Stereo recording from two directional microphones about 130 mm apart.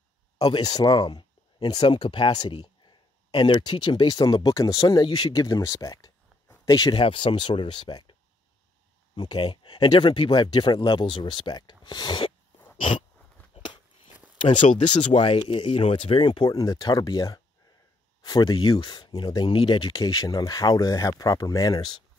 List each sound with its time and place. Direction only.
0.4 s speech: 30° left (ahead or behind)
7.0 s speech: 45° left (ahead or behind)
13.6 s a sound: 40° left (ahead or behind)
14.6 s speech: 70° left (ahead or behind)
15.1 s speech: 40° left (ahead or behind)